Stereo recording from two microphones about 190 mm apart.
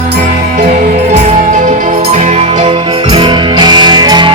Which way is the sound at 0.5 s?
40° right (ahead or behind).